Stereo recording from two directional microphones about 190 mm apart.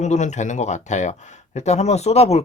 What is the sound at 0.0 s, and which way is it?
Speech, 40° left (ahead or behind).